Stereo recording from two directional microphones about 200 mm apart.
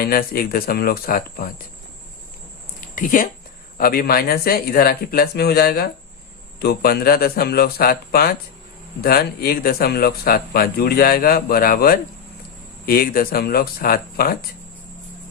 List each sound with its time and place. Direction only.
0.0 s speech: 45° left (ahead or behind)
2.9 s speech: 40° left (ahead or behind)